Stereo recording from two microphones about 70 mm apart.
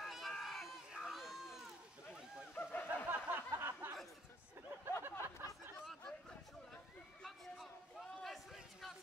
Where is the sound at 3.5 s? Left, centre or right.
Right.